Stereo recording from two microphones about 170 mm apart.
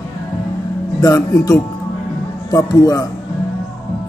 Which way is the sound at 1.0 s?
20° left (ahead or behind).